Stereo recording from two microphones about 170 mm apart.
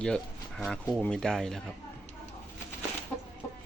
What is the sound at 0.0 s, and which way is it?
Speech, 5° left (ahead or behind).